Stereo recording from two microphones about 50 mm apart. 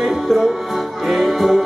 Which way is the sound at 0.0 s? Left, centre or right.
Centre.